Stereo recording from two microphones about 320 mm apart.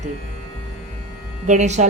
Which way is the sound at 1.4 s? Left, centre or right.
Right.